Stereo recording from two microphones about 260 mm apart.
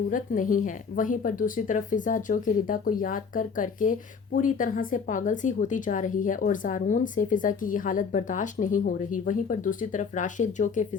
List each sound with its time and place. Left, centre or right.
0.1 s a woman's voice: left